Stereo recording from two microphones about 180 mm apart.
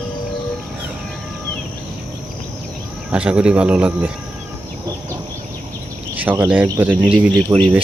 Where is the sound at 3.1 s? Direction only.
5° right (ahead or behind).